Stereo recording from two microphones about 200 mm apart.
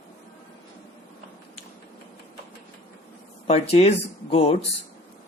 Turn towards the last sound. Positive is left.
turn(degrees=30)  # may be behind; listen again after turning